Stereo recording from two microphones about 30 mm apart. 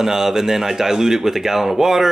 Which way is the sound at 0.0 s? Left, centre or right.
Centre.